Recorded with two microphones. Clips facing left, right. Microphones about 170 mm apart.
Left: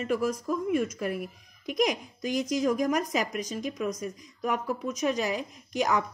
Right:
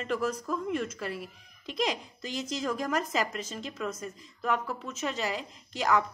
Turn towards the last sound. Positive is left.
turn(degrees=15)  # may be behind; listen again after turning